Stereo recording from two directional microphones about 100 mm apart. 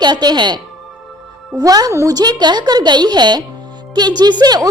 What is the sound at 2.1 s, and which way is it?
A woman's voice, 45° right (ahead or behind).